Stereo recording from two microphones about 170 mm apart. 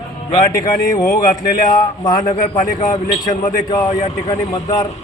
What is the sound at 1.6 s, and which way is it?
Speech, 45° left (ahead or behind).